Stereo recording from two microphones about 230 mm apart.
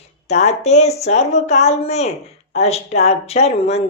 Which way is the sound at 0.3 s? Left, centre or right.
Left.